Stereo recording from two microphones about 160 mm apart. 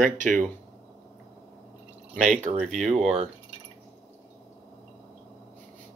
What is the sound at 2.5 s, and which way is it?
Speech, centre (ahead or behind).